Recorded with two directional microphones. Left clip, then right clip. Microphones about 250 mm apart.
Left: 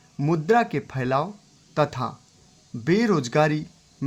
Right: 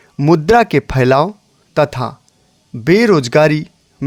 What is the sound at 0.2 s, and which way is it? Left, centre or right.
Speech, right.